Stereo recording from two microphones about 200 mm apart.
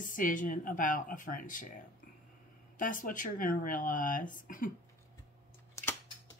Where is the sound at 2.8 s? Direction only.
40° left (ahead or behind).